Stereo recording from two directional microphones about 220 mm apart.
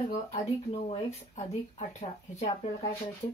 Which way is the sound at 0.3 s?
30° left (ahead or behind).